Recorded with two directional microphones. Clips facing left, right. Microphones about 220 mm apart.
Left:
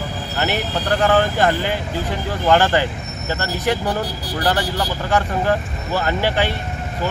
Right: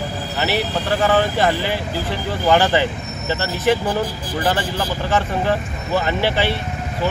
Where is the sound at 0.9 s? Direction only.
Centre (ahead or behind).